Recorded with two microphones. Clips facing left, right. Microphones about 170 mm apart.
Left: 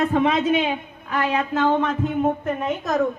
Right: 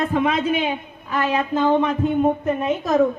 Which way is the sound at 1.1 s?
20° right (ahead or behind).